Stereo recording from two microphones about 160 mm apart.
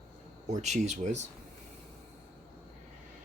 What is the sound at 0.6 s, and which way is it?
Speech, 45° right (ahead or behind).